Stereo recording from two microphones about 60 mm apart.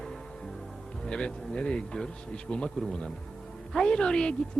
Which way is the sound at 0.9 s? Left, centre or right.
Centre.